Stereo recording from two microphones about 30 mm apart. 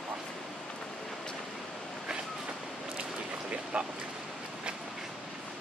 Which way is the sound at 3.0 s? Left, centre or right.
Right.